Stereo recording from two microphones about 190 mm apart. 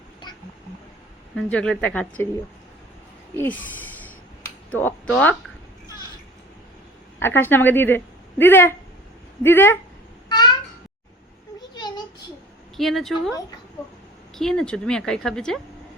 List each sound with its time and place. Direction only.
1.4 s speech: 5° left (ahead or behind)
3.3 s speech: 10° left (ahead or behind)
7.2 s speech: 10° left (ahead or behind)
10.2 s meow: 20° left (ahead or behind)
11.7 s a sound: 20° left (ahead or behind)
12.7 s speech: centre (ahead or behind)
14.3 s a woman's voice: 5° left (ahead or behind)